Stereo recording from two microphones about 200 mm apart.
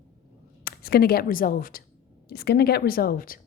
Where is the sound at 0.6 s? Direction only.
50° left (ahead or behind).